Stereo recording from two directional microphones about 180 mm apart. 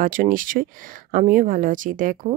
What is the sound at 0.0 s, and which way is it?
Speech, 50° right (ahead or behind).